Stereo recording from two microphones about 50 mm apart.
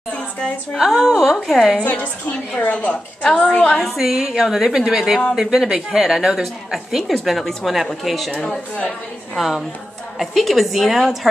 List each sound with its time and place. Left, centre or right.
0.1 s a sound: left
0.7 s a woman's voice: centre
1.8 s a woman's voice: left
3.8 s a woman's voice: centre
8.4 s speech: centre
9.4 s a woman's voice: centre